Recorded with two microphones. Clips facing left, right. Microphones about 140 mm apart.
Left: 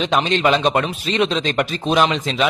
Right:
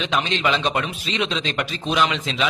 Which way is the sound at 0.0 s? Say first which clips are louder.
Left 5 dB; 40° left (ahead or behind).